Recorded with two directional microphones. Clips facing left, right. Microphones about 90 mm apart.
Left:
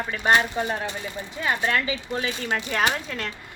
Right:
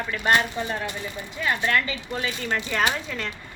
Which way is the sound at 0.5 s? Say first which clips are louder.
Left 2 dB; 30° left (ahead or behind).